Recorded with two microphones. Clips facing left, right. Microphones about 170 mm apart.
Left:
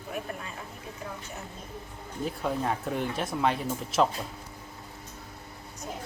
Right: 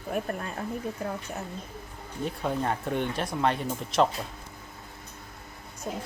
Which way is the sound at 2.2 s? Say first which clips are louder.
Right 1 dB; centre (ahead or behind).